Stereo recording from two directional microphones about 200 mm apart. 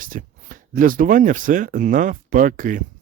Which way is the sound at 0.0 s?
45° right (ahead or behind).